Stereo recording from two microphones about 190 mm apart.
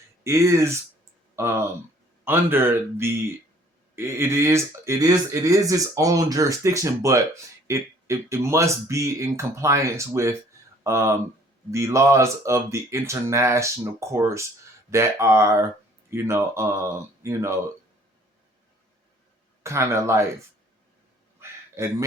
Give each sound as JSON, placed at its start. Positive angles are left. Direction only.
{"t": 0.3, "sound": "speech", "side_deg": -15}
{"t": 19.6, "sound": "speech", "side_deg": -15}
{"t": 21.4, "sound": "a sound", "side_deg": -10}
{"t": 21.8, "sound": "speech", "side_deg": -15}